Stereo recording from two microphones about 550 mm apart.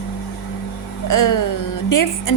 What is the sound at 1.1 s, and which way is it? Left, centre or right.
A woman's voice, left.